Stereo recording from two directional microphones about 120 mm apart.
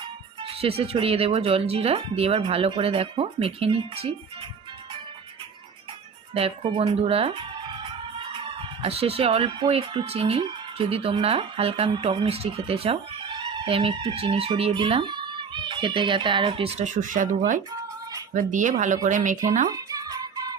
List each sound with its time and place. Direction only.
0.6 s speech: 55° right (ahead or behind)
6.3 s a child's voice: 50° right (ahead or behind)
16.7 s speech: 90° right
19.6 s music: 30° right (ahead or behind)